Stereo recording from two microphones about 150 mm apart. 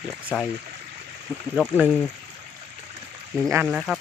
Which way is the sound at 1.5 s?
5° right (ahead or behind).